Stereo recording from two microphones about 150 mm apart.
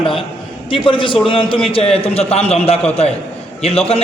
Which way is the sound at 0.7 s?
35° left (ahead or behind).